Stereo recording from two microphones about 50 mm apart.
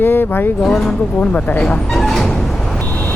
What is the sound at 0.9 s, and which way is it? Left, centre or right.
Speech, left.